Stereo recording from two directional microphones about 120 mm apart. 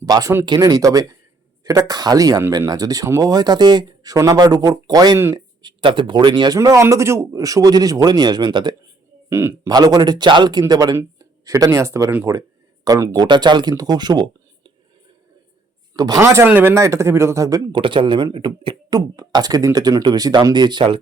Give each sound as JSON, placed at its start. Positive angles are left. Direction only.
{"t": 0.0, "sound": "speech", "side_deg": -30}
{"t": 5.6, "sound": "speech", "side_deg": -40}
{"t": 9.3, "sound": "speech", "side_deg": -25}
{"t": 9.6, "sound": "speech", "side_deg": -35}
{"t": 13.1, "sound": "speech", "side_deg": -40}
{"t": 16.0, "sound": "speech", "side_deg": -30}